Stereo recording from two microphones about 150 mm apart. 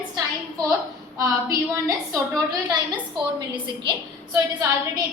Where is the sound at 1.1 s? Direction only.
20° right (ahead or behind).